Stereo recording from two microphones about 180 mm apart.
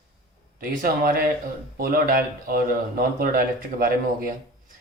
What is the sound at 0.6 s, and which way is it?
A man's voice, 50° right (ahead or behind).